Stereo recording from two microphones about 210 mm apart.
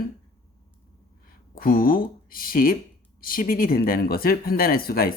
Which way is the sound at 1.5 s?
40° left (ahead or behind).